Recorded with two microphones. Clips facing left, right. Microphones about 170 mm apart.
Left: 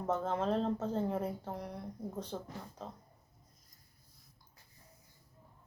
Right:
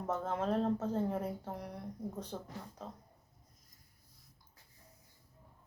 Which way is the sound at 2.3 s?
5° right (ahead or behind).